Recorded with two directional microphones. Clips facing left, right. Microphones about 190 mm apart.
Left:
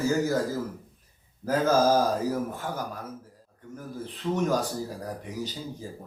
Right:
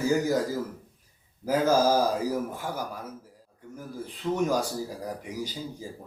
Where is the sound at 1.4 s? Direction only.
10° right (ahead or behind).